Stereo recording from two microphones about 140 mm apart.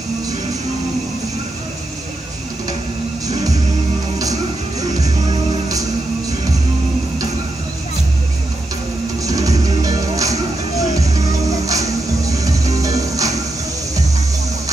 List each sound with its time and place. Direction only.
9.2 s music: 25° right (ahead or behind)